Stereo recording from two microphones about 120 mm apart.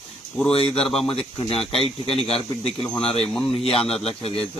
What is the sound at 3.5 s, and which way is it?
Speech, 55° left (ahead or behind).